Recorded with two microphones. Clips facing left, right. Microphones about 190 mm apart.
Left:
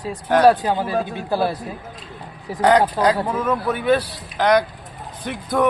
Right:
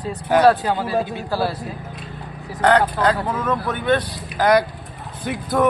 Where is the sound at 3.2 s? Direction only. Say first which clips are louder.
Left 1 dB; 10° left (ahead or behind).